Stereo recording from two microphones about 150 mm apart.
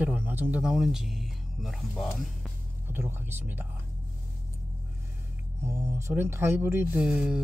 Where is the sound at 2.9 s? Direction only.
15° right (ahead or behind).